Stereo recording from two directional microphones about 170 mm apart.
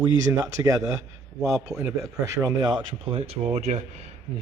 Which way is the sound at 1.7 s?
Centre (ahead or behind).